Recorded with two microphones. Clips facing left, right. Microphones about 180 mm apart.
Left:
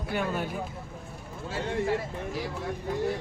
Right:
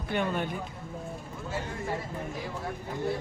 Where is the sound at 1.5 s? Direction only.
80° left.